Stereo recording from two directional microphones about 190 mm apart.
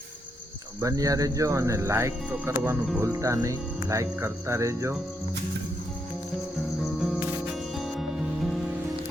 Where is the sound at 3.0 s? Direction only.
15° right (ahead or behind).